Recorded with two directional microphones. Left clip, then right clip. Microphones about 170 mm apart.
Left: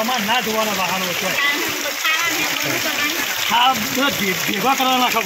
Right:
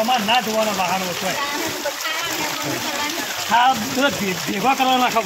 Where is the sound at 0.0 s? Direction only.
10° left (ahead or behind).